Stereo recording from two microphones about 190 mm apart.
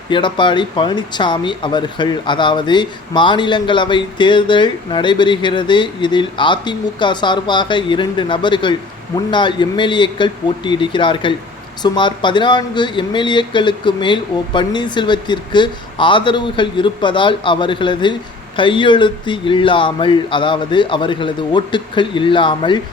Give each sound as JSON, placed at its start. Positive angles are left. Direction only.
{"t": 0.1, "sound": "speech", "side_deg": 25}